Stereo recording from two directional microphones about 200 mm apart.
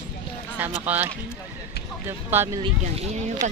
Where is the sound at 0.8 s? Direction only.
10° right (ahead or behind).